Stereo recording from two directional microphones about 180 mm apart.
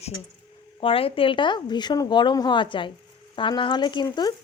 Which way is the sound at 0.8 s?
30° left (ahead or behind).